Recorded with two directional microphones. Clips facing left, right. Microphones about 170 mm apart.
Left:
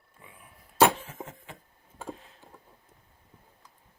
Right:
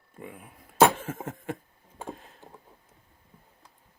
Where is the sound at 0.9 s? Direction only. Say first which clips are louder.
Right 6 dB; 50° right (ahead or behind).